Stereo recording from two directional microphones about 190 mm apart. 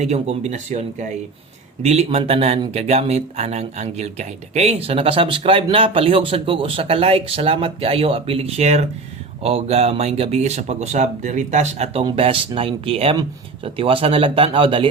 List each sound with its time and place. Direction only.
0.0 s speech: 35° right (ahead or behind)